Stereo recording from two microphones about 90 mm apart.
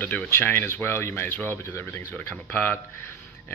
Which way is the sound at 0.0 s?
20° left (ahead or behind).